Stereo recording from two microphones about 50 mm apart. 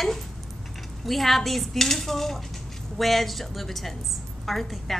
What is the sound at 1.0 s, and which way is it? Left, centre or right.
Speech, centre.